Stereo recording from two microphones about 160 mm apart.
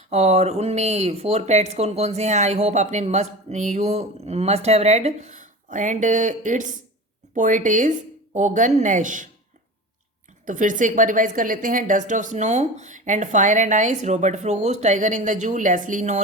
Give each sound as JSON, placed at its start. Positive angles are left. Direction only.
{"t": 0.1, "sound": "speech", "side_deg": -45}
{"t": 10.4, "sound": "speech", "side_deg": -55}